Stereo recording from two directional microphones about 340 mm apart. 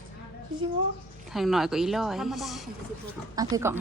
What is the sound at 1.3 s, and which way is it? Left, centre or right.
A woman's voice, centre.